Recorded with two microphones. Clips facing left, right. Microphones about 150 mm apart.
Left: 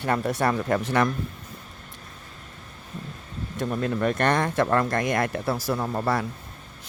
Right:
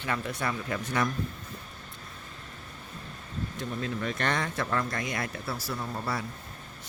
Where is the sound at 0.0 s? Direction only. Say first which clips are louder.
Left 8 dB; 45° left (ahead or behind).